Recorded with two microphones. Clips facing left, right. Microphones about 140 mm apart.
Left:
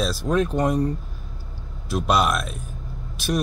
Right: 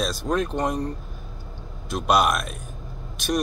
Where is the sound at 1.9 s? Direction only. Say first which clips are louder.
Even; centre (ahead or behind).